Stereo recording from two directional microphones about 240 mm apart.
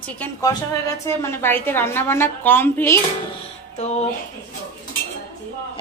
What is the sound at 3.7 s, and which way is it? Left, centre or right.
Music, left.